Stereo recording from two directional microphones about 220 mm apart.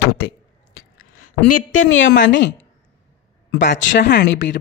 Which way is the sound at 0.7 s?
85° left.